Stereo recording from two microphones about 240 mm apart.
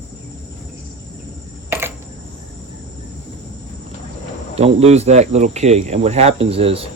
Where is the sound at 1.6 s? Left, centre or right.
Centre.